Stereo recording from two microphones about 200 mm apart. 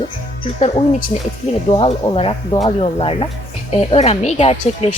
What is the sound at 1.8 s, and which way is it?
A woman's voice, 25° left (ahead or behind).